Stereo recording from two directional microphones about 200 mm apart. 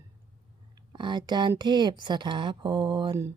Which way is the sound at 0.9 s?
25° right (ahead or behind).